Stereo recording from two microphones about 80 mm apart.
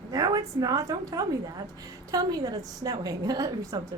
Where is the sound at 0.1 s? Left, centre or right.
Right.